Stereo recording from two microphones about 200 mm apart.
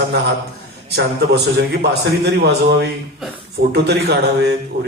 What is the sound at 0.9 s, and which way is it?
A man's voice, 55° right (ahead or behind).